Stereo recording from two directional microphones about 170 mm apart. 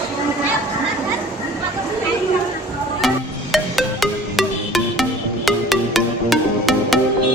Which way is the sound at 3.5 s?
Centre (ahead or behind).